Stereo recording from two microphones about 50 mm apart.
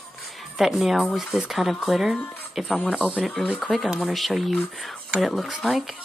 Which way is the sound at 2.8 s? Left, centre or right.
Centre.